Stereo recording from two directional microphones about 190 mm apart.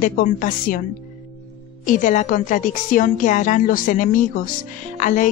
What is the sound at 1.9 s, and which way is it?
A woman's voice, 40° left (ahead or behind).